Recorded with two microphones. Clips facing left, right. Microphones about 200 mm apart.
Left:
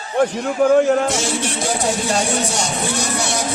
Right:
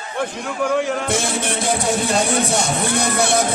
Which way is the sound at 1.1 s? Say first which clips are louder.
Even; 55° right (ahead or behind).